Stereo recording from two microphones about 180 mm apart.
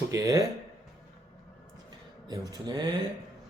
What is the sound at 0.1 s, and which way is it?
Speech, 15° right (ahead or behind).